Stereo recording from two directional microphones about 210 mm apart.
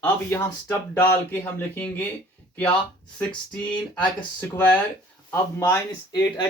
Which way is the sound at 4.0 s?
20° left (ahead or behind).